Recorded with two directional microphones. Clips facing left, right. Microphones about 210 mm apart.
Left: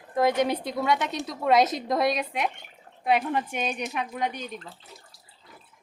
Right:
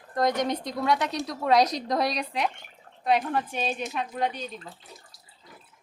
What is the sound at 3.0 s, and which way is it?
Speech, 15° left (ahead or behind).